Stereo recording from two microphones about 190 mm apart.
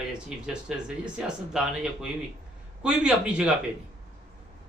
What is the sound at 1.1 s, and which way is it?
A man's voice, 5° right (ahead or behind).